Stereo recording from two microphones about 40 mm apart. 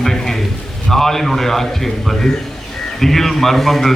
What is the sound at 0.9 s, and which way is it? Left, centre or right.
A man's voice, centre.